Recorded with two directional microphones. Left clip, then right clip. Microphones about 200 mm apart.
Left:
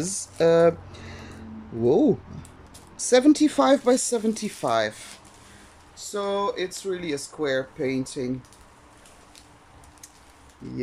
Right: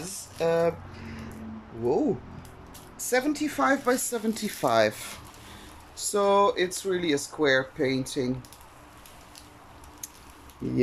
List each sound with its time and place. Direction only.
0.4 s speech: 25° left (ahead or behind)
1.9 s speech: 20° left (ahead or behind); by 4.9 s centre (ahead or behind)
5.9 s speech: 5° right (ahead or behind)